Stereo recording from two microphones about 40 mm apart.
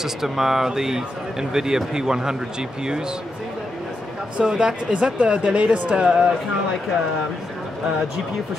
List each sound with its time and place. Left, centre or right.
0.0 s speech: centre
4.4 s speech: centre
6.0 s speech: right